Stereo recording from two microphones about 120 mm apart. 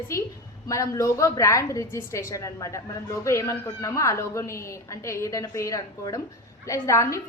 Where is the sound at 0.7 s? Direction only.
25° left (ahead or behind).